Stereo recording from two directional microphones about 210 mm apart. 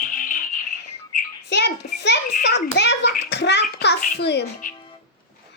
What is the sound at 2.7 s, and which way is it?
Bathtub, 55° left (ahead or behind).